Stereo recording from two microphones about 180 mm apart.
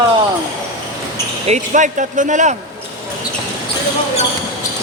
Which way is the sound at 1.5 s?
45° right (ahead or behind).